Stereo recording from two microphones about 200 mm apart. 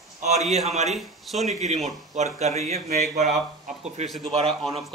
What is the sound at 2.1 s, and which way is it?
A man's voice, 35° right (ahead or behind).